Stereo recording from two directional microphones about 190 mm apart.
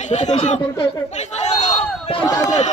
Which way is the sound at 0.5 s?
20° left (ahead or behind).